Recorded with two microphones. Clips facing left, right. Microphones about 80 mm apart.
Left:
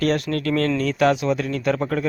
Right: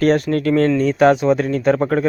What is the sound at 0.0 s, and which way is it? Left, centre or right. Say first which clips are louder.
Speech: right 6 dB; right.